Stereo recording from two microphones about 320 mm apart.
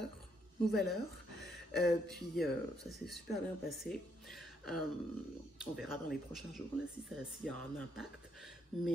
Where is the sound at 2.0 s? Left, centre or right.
Centre.